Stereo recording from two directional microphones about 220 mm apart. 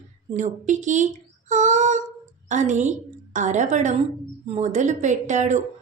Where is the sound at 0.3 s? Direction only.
35° right (ahead or behind).